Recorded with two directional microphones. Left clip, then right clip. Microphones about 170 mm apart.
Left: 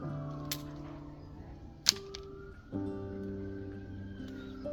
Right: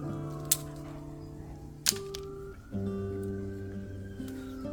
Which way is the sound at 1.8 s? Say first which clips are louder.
Left 1 dB; 35° right (ahead or behind).